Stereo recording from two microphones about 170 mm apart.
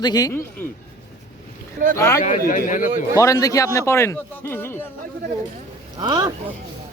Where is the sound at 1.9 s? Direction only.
15° left (ahead or behind).